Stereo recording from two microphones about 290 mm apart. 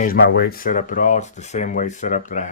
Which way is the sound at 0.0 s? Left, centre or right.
Left.